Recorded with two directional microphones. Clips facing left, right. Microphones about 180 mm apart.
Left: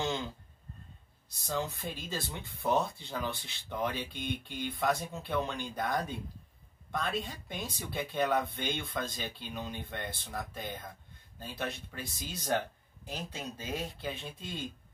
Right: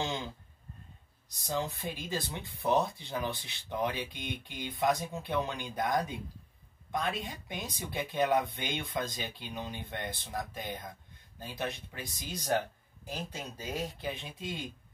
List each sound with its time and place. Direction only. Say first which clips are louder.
1.3 s speech: right 1 dB; 15° right (ahead or behind)